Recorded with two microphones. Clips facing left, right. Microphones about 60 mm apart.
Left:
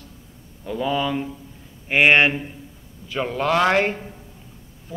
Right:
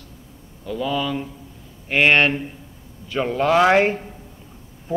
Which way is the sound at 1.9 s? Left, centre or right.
Centre.